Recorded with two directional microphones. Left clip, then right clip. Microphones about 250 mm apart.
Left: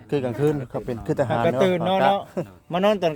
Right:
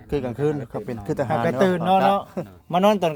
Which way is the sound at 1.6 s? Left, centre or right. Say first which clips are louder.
Right 3 dB; right.